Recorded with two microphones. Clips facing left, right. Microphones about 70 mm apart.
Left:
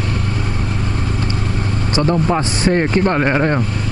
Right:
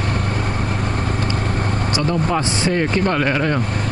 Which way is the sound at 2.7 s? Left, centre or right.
Left.